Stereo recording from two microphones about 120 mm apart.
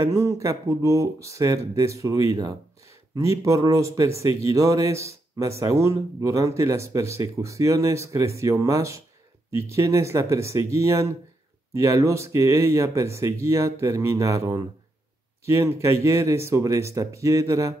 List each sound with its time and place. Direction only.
0.0 s speech: 25° right (ahead or behind)